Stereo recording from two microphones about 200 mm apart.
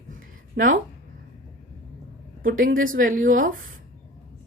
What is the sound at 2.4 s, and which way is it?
Speech, 45° right (ahead or behind).